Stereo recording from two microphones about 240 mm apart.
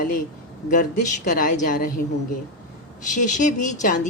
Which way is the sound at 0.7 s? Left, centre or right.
Left.